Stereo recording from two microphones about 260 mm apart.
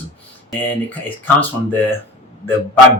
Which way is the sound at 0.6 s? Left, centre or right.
Centre.